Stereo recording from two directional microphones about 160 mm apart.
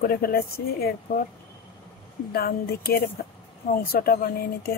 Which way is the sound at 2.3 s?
75° left (ahead or behind).